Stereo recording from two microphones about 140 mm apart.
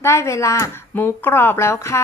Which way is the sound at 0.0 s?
20° left (ahead or behind).